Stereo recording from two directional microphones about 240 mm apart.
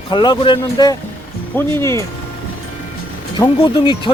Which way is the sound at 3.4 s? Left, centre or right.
Centre.